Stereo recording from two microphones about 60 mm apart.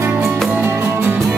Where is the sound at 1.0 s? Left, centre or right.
Centre.